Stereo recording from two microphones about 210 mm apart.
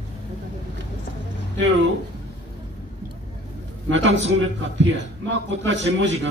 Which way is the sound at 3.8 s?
65° right (ahead or behind).